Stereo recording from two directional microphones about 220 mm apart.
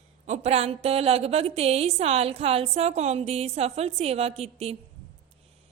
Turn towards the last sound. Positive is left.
turn(degrees=-30)  # may be behind; listen again after turning